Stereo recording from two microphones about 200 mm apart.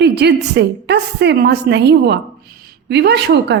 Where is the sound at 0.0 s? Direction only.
55° right (ahead or behind).